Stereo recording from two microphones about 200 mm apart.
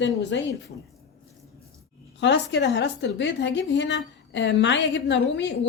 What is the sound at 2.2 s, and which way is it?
A woman's voice, 60° left (ahead or behind).